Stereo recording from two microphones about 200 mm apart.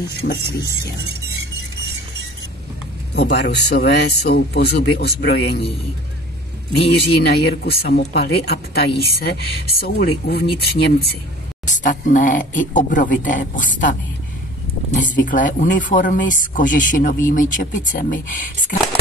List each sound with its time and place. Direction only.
0.2 s speech: 50° left (ahead or behind)
3.2 s speech: 55° left (ahead or behind)
6.9 s speech: 55° left (ahead or behind)
11.6 s speech: 40° left (ahead or behind)
15.0 s speech: 40° left (ahead or behind)